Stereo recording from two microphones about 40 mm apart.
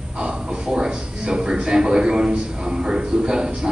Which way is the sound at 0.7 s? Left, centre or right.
Right.